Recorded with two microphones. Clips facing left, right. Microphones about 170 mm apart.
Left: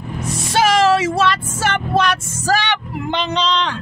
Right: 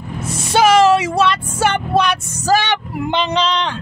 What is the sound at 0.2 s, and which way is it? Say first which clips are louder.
Music: right 3 dB; centre (ahead or behind).